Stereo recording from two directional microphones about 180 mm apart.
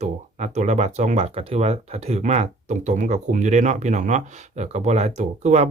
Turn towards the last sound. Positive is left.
turn(degrees=-40)  # may be behind; listen again after turning